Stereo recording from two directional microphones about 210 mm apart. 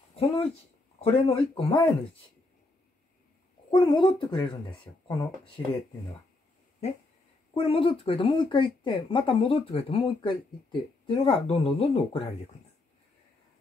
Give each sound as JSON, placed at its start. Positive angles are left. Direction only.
{"t": 0.1, "sound": "speech", "side_deg": 30}
{"t": 3.7, "sound": "speech", "side_deg": 25}
{"t": 7.5, "sound": "speech", "side_deg": 25}